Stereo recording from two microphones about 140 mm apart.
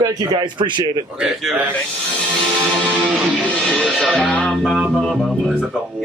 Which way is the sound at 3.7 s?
5° left (ahead or behind).